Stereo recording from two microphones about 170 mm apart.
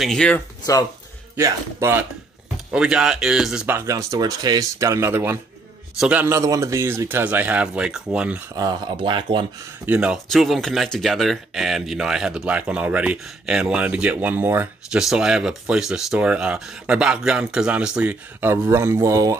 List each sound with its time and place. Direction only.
0.0 s speech: 5° left (ahead or behind)
1.3 s speech: 15° right (ahead or behind)
2.7 s speech: 5° right (ahead or behind)
8.5 s speech: 25° right (ahead or behind)
9.8 s speech: 5° right (ahead or behind)